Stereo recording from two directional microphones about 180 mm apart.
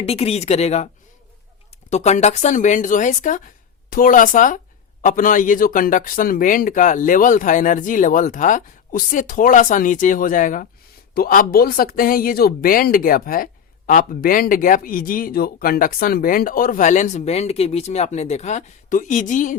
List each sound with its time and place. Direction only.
0.0 s speech: 35° left (ahead or behind)
1.9 s speech: 40° left (ahead or behind)